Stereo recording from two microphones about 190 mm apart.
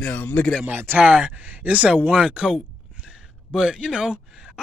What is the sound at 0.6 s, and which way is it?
Speech, 10° right (ahead or behind).